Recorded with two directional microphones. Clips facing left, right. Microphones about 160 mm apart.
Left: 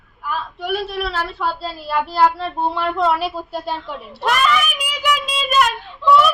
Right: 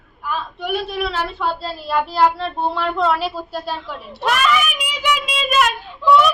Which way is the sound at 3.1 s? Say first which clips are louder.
Even; 15° left (ahead or behind).